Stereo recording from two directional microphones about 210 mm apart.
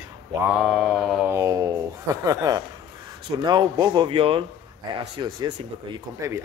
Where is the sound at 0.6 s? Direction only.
Centre (ahead or behind).